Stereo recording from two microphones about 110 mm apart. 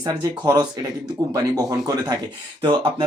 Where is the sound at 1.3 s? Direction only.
35° right (ahead or behind).